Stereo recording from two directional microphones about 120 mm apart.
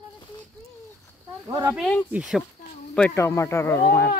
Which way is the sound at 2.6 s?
90° left.